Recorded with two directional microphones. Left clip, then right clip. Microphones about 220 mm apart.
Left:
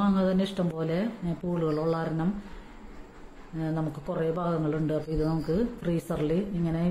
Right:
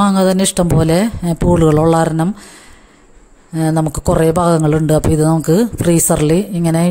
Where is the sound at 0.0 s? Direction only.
50° right (ahead or behind).